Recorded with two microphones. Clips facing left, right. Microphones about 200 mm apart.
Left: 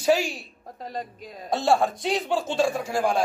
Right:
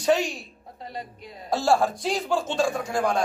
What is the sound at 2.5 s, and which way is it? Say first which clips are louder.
Speech: left 3 dB; 25° left (ahead or behind).